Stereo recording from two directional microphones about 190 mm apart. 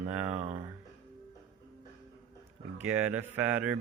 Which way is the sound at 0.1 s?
10° right (ahead or behind).